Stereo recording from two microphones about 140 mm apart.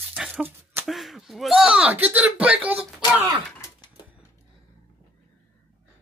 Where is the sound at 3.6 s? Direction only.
30° left (ahead or behind).